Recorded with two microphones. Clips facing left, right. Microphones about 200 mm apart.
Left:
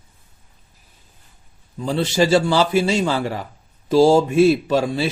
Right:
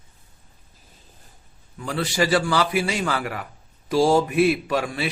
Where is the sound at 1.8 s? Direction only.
25° left (ahead or behind).